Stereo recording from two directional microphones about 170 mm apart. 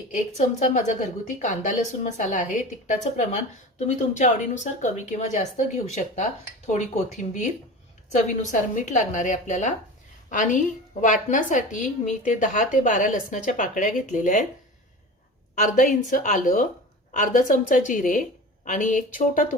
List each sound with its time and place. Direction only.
0.3 s speech: 45° left (ahead or behind)
15.5 s speech: 45° left (ahead or behind)